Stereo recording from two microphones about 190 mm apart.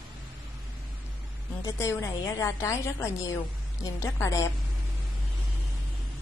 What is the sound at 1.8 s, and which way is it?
A woman's voice, 15° left (ahead or behind).